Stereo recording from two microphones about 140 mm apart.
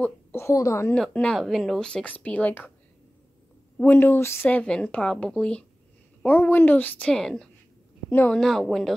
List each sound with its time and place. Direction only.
0.0 s a woman's voice: 15° left (ahead or behind)
0.9 s speech: 5° left (ahead or behind)
3.7 s a woman's voice: 15° left (ahead or behind)
8.4 s a woman's voice: centre (ahead or behind)